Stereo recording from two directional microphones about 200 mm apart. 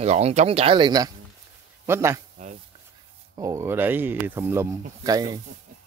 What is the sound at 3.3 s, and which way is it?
Speech, 15° right (ahead or behind).